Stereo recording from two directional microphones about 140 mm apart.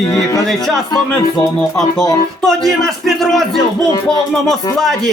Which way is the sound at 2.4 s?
Centre (ahead or behind).